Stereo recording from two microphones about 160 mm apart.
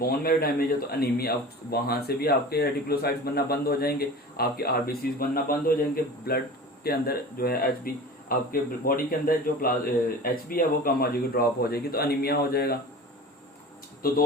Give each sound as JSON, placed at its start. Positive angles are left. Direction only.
{"t": 0.0, "sound": "a man's voice", "side_deg": 70}